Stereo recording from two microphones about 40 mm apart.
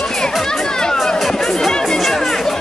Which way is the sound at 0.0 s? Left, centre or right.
Centre.